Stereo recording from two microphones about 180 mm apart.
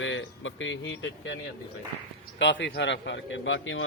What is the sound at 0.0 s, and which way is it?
A man's voice, 90° left.